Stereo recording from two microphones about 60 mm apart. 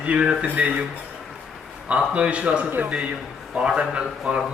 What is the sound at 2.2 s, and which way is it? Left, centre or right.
A man's voice, right.